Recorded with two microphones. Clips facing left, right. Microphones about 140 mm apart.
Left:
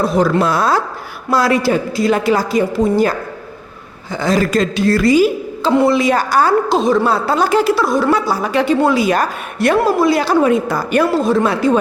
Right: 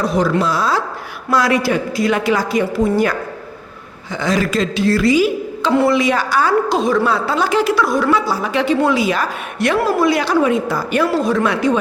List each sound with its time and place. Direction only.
0.3 s a woman's voice: 55° left (ahead or behind)
1.3 s a woman's voice: 35° left (ahead or behind)
5.7 s a woman's voice: 20° left (ahead or behind)
6.0 s a woman's voice: 45° left (ahead or behind)
6.7 s a woman's voice: 25° left (ahead or behind)
7.1 s a woman's voice: 45° left (ahead or behind); by 8.1 s 25° left (ahead or behind)
8.1 s a woman's voice: 45° left (ahead or behind)
9.7 s a woman's voice: 30° left (ahead or behind); by 11.1 s 50° left (ahead or behind)
11.1 s a woman's voice: 25° left (ahead or behind)